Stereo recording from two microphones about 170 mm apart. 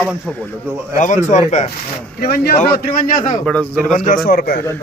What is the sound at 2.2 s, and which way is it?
A man's voice, 65° left (ahead or behind).